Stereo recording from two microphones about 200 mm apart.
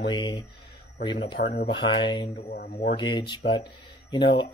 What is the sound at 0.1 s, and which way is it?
Speech, 25° left (ahead or behind).